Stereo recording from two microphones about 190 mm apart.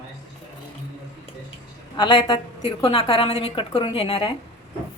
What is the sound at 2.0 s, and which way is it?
A woman's voice, 25° left (ahead or behind).